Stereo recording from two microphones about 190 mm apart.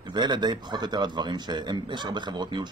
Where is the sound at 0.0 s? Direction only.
20° right (ahead or behind).